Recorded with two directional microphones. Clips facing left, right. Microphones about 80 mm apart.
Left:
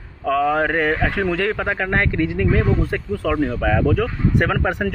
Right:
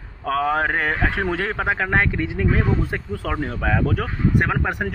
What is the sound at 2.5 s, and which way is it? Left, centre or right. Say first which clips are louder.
Speech: left 3 dB; centre.